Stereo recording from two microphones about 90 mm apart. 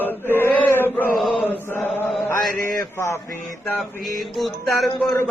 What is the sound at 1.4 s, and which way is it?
Chant, 20° left (ahead or behind).